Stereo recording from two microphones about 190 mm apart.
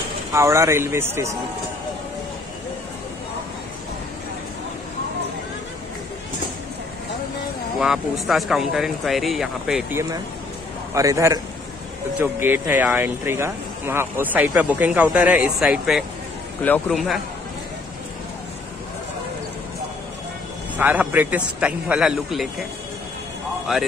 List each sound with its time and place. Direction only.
0.3 s speech: 15° right (ahead or behind)
7.8 s speech: centre (ahead or behind)
10.9 s speech: 15° right (ahead or behind)
16.6 s a man's voice: 10° left (ahead or behind)
20.7 s speech: 10° right (ahead or behind)